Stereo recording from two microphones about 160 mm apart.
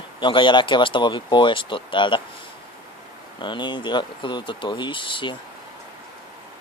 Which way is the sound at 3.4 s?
30° left (ahead or behind).